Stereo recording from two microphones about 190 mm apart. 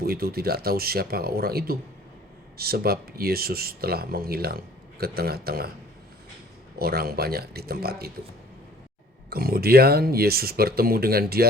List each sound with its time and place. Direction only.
0.0 s speech: 50° right (ahead or behind)
6.7 s speech: 55° right (ahead or behind)
9.3 s speech: 55° right (ahead or behind)